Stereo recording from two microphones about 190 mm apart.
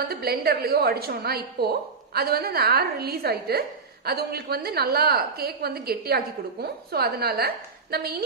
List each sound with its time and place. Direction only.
0.1 s a woman's voice: 55° right (ahead or behind)